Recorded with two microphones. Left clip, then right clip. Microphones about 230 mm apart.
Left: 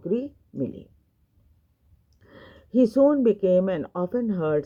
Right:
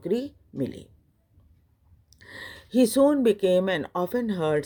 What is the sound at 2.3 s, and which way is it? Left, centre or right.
Speech, right.